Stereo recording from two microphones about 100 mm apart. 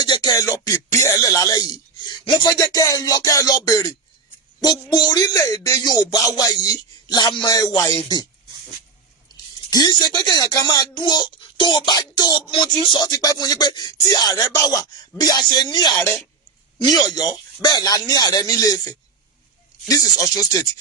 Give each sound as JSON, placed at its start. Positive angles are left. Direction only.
{"t": 0.0, "sound": "speech", "side_deg": 40}
{"t": 9.6, "sound": "speech", "side_deg": 45}